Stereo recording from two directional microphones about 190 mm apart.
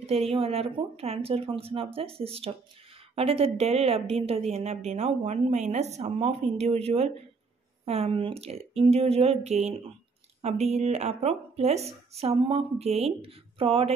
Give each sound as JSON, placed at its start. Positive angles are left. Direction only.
{"t": 0.0, "sound": "a woman's voice", "side_deg": -30}